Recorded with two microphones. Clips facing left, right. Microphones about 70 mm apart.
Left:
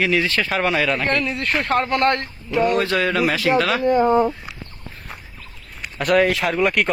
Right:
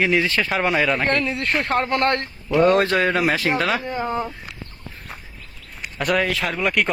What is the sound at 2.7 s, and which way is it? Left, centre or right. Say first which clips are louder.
Speech: right 2 dB; right.